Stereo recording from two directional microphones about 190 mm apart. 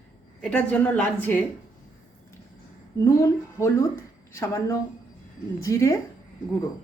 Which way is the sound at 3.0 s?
15° left (ahead or behind).